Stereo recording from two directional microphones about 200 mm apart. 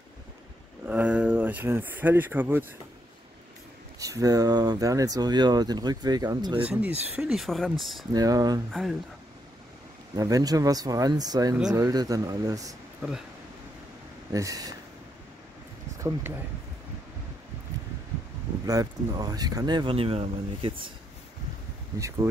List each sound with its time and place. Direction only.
0.8 s speech: 5° right (ahead or behind)
4.0 s speech: 15° right (ahead or behind)
6.6 s speech: 5° right (ahead or behind)
8.1 s speech: 20° right (ahead or behind)
10.1 s speech: 20° right (ahead or behind)
14.3 s speech: 15° right (ahead or behind)
18.7 s speech: 20° right (ahead or behind)
21.9 s speech: 15° right (ahead or behind)